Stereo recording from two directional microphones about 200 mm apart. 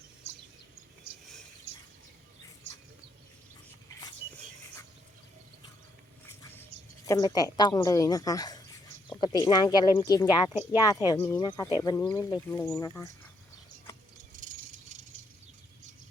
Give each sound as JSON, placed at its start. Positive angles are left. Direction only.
{"t": 6.4, "sound": "a sound", "side_deg": 15}
{"t": 9.2, "sound": "speech", "side_deg": 20}
{"t": 10.5, "sound": "speech", "side_deg": -15}
{"t": 11.0, "sound": "speech", "side_deg": 15}
{"t": 14.3, "sound": "rattle", "side_deg": -40}